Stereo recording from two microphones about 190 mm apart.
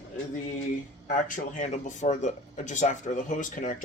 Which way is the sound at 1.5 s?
40° left (ahead or behind).